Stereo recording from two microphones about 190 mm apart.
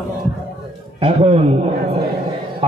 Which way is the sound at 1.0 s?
35° right (ahead or behind).